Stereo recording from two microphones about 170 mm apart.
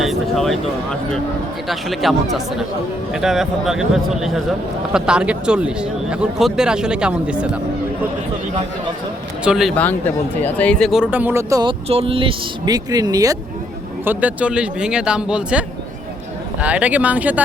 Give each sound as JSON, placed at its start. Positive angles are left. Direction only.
{"t": 0.0, "sound": "speech", "side_deg": 0}
{"t": 9.4, "sound": "speech", "side_deg": -5}
{"t": 10.4, "sound": "speech", "side_deg": 10}
{"t": 11.9, "sound": "speech", "side_deg": -35}
{"t": 14.0, "sound": "speech", "side_deg": -10}